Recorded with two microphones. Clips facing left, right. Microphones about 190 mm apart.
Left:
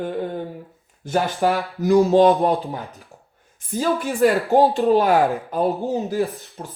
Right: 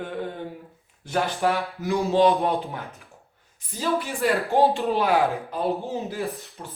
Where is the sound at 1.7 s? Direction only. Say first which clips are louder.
Left 10 dB; 40° left (ahead or behind).